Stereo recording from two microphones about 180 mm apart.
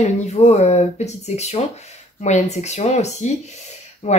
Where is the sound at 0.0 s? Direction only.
40° left (ahead or behind).